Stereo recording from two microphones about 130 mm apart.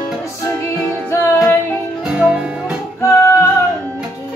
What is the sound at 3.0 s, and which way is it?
Music, 20° left (ahead or behind).